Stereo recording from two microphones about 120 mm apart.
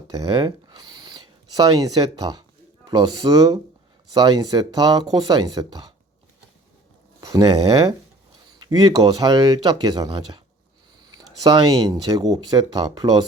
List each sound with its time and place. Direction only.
0.1 s speech: 35° right (ahead or behind)
7.2 s speech: 35° right (ahead or behind)